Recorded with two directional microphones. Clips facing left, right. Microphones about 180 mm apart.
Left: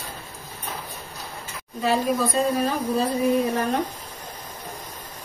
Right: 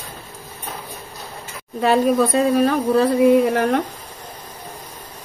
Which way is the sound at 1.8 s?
60° right (ahead or behind).